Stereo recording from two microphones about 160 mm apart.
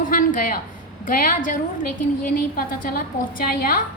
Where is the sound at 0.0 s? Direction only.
55° left (ahead or behind).